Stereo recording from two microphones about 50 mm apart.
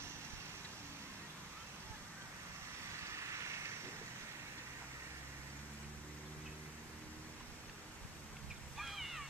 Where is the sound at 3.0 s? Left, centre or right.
Right.